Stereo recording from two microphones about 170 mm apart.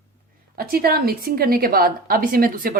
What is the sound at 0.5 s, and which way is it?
A woman's voice, 60° right (ahead or behind).